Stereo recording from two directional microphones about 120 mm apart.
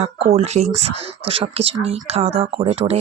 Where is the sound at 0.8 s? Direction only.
50° right (ahead or behind).